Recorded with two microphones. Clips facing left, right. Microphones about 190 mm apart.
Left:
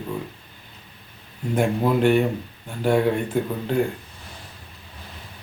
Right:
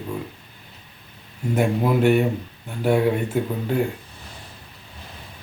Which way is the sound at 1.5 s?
5° right (ahead or behind).